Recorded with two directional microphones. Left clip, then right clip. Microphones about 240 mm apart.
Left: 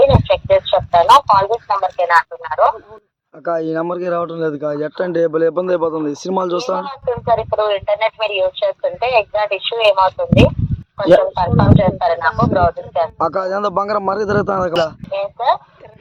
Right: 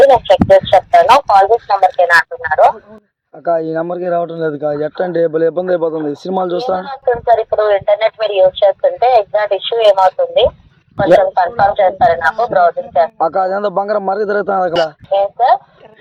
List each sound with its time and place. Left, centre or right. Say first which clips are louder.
0.2 s speech: right 5 dB; centre
3.4 s speech: right 3 dB; centre
6.8 s speech: right 5 dB; centre
13.1 s speech: right 4 dB; centre
15.1 s speech: right 8 dB; centre